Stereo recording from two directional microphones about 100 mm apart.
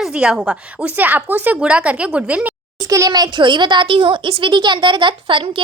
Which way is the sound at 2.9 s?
35° right (ahead or behind).